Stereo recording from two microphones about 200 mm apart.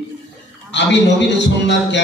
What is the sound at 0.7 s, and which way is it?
Mantra, 60° left (ahead or behind).